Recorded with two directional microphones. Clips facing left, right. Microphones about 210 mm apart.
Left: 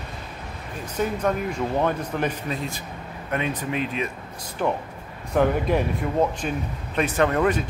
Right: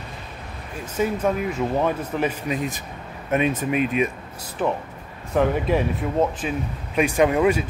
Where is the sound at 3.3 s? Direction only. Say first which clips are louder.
Right 5 dB; 20° right (ahead or behind).